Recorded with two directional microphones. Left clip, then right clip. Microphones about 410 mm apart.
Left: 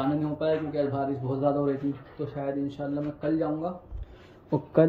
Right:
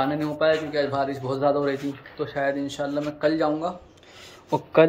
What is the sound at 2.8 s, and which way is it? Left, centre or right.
A man's voice, centre.